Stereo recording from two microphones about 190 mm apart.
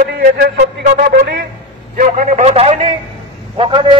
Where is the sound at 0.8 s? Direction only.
45° right (ahead or behind).